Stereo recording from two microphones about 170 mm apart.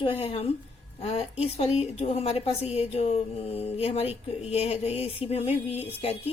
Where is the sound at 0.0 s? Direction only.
30° left (ahead or behind).